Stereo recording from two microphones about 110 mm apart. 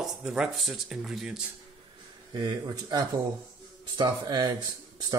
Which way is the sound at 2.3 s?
40° right (ahead or behind).